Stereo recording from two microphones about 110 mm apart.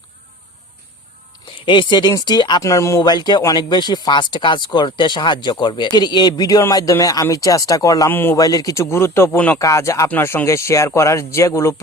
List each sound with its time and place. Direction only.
1.6 s speech: 45° left (ahead or behind)
2.6 s speech: 30° left (ahead or behind)
3.0 s speech: 40° left (ahead or behind)
8.1 s speech: 20° left (ahead or behind)
8.4 s speech: 35° left (ahead or behind); by 9.6 s 20° left (ahead or behind)
9.6 s speech: 30° left (ahead or behind)